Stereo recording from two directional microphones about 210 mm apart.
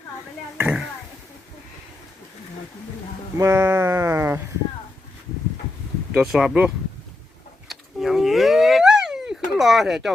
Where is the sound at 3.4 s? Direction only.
15° right (ahead or behind).